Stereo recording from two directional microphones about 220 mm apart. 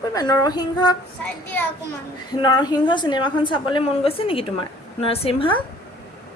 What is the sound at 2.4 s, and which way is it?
Speech, 20° left (ahead or behind).